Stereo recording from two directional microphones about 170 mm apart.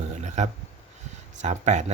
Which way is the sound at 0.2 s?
45° right (ahead or behind).